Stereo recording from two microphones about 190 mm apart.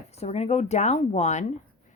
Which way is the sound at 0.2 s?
35° left (ahead or behind).